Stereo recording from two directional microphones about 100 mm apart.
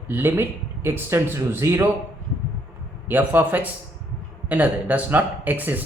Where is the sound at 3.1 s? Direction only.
20° right (ahead or behind).